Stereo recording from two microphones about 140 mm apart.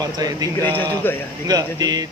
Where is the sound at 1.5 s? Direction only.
30° right (ahead or behind).